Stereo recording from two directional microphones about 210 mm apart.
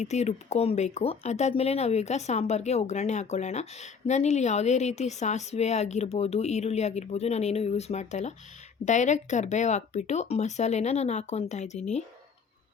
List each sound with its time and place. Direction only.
0.0 s speech: 30° left (ahead or behind)